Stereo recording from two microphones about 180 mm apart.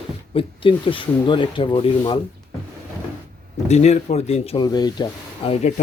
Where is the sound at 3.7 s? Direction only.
40° left (ahead or behind).